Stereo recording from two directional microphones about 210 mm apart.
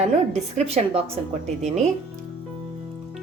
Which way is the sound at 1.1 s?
30° right (ahead or behind).